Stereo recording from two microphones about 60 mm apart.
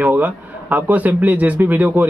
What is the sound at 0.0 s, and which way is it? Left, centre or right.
A man's voice, right.